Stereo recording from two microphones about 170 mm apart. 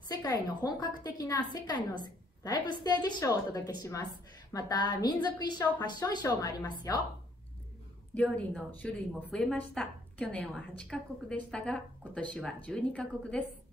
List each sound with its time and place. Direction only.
0.1 s a woman's voice: 20° left (ahead or behind)
8.1 s a woman's voice: 10° left (ahead or behind)